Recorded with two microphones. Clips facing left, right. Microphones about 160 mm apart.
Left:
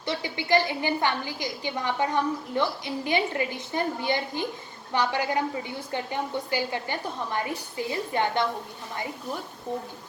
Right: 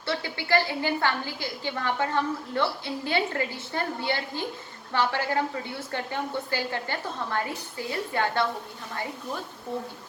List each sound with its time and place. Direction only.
0.0 s a woman's voice: 15° left (ahead or behind)